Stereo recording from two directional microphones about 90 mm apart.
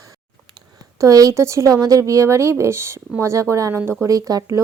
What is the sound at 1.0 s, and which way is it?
Speech, 40° right (ahead or behind).